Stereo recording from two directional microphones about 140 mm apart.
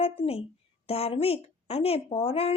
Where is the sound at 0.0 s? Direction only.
45° left (ahead or behind).